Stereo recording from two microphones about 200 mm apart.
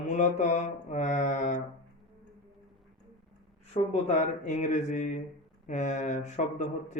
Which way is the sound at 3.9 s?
35° left (ahead or behind).